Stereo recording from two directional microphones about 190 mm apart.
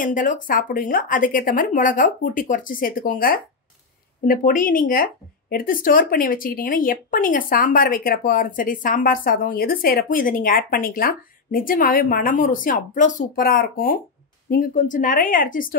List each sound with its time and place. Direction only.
0.0 s speech: 45° left (ahead or behind)